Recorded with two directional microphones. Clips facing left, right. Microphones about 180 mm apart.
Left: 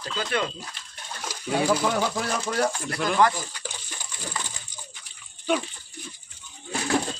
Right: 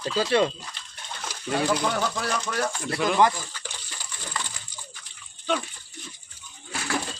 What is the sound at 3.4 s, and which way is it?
Water, 15° left (ahead or behind).